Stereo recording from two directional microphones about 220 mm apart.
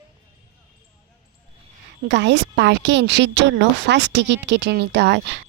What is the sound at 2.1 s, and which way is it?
A woman's voice, 55° right (ahead or behind).